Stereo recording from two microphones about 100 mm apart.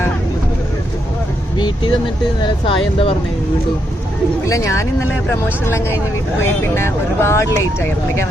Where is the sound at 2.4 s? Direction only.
65° left (ahead or behind).